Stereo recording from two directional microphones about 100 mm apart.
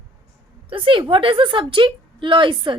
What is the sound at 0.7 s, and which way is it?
A woman's voice, 60° right (ahead or behind).